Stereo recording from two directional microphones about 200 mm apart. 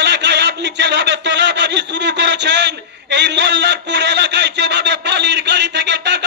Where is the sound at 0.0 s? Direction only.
60° right (ahead or behind).